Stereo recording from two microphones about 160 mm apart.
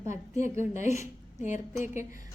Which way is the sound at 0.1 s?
50° left (ahead or behind).